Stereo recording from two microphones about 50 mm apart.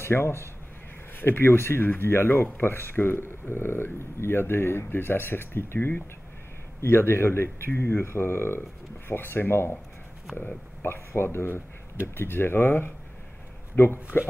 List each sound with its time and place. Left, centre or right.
0.0 s speech: left
1.1 s speech: left
10.8 s speech: left
14.1 s speech: left